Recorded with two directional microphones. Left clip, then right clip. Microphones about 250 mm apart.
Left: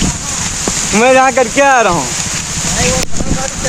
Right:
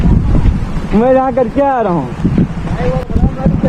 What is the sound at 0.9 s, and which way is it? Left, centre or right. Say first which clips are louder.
Speech: left 2 dB; centre.